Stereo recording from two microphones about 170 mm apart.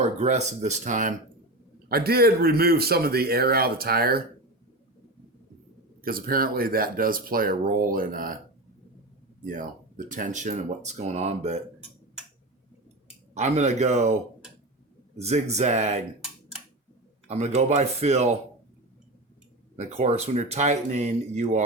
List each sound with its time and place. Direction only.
0.0 s speech: 40° right (ahead or behind)
1.9 s speech: 65° right (ahead or behind)
6.0 s speech: 60° right (ahead or behind)
9.5 s speech: 50° right (ahead or behind)
13.3 s speech: 40° right (ahead or behind)
15.2 s speech: 40° right (ahead or behind)
17.2 s speech: 40° right (ahead or behind)
19.7 s speech: 40° right (ahead or behind)